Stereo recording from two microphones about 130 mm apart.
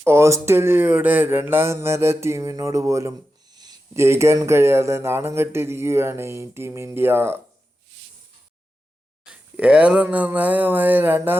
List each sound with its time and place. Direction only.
0.0 s speech: 20° right (ahead or behind)
3.9 s speech: 20° right (ahead or behind)
9.2 s speech: 5° right (ahead or behind)